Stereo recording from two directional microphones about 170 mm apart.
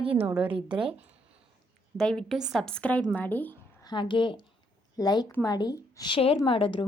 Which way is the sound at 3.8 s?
25° left (ahead or behind).